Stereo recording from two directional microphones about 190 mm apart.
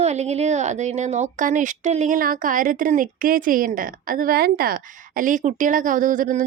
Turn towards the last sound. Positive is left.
turn(degrees=-45)  # may be behind; listen again after turning